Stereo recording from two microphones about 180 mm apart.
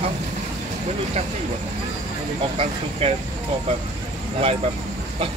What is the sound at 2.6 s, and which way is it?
Speech, 35° right (ahead or behind).